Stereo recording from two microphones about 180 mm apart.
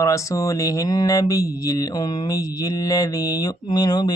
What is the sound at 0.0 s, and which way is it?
Mantra, 15° left (ahead or behind).